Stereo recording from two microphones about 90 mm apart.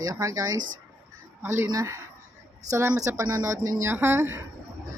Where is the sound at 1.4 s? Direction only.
25° right (ahead or behind).